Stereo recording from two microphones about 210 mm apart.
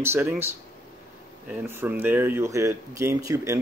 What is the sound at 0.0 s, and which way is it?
Speech, 10° right (ahead or behind).